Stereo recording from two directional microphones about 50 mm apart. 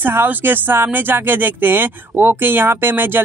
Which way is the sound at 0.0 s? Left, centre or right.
Right.